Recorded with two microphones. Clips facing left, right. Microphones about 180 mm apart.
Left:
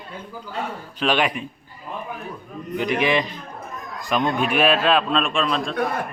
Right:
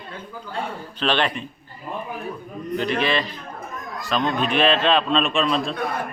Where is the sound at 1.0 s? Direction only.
10° left (ahead or behind).